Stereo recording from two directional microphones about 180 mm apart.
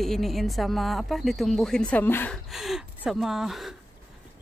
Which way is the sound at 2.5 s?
Centre (ahead or behind).